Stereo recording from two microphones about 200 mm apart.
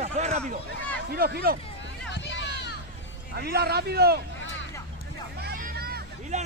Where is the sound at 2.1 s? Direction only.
65° left (ahead or behind).